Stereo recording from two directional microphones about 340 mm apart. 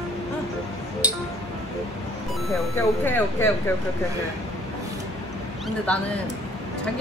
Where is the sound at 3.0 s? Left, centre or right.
Centre.